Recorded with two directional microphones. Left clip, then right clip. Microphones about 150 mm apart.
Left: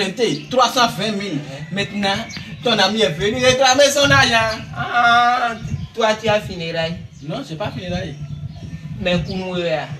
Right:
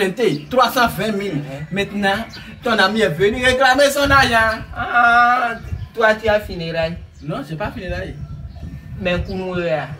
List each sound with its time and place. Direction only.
0.0 s a man's voice: 10° right (ahead or behind)
4.7 s a sound: 20° right (ahead or behind)
5.9 s speech: 15° right (ahead or behind)
9.0 s a man's voice: centre (ahead or behind)